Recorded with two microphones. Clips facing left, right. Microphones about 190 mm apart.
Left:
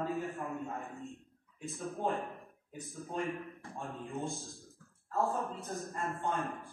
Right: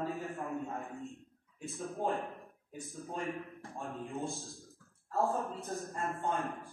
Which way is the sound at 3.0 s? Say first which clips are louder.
Left 2 dB; centre (ahead or behind).